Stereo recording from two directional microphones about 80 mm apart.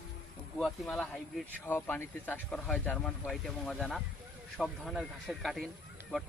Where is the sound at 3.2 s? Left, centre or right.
Centre.